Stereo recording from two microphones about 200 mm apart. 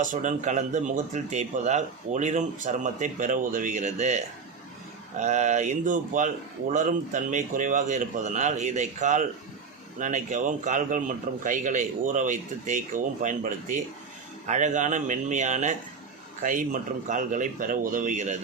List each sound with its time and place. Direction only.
0.0 s speech: 40° right (ahead or behind)